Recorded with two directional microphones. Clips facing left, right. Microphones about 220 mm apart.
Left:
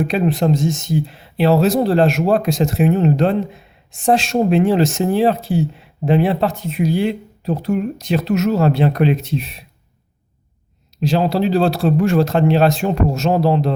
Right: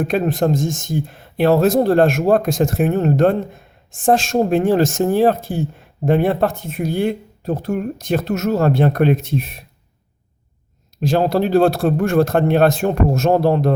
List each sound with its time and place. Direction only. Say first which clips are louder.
0.0 s speech: even; 50° right (ahead or behind)
11.0 s speech: even; 50° right (ahead or behind)